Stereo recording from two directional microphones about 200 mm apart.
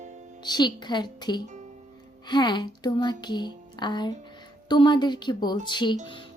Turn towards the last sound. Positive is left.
turn(degrees=20)  # may be behind; listen again after turning